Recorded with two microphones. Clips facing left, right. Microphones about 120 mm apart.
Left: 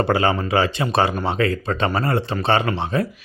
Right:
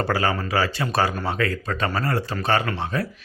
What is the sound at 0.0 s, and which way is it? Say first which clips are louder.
A man's voice: left 4 dB; 25° left (ahead or behind).